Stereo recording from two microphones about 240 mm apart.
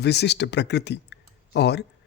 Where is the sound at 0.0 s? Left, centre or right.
Left.